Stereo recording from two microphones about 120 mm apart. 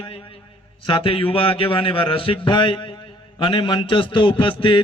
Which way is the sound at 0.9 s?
50° left (ahead or behind).